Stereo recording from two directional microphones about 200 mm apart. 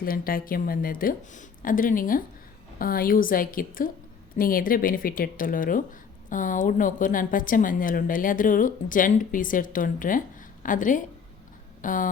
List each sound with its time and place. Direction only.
0.0 s speech: 45° left (ahead or behind)